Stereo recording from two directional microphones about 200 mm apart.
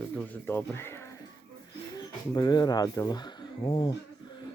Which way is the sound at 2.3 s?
20° left (ahead or behind).